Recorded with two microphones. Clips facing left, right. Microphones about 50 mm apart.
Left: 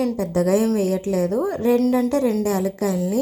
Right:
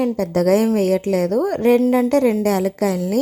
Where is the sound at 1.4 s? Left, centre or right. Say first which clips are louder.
Right 5 dB; right.